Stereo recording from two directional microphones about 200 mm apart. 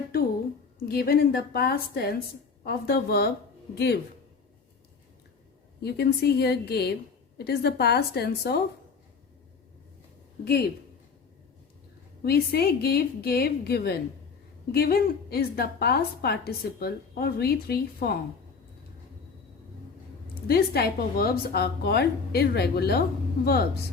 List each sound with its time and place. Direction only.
0.8 s a woman's voice: 50° left (ahead or behind)
5.8 s a woman's voice: 55° left (ahead or behind)
10.4 s a woman's voice: 50° left (ahead or behind)
12.2 s a woman's voice: 50° left (ahead or behind)
20.5 s a woman's voice: 50° left (ahead or behind)